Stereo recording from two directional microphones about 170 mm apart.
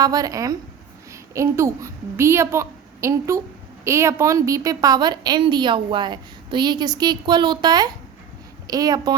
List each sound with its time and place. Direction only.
0.0 s a woman's voice: 20° right (ahead or behind)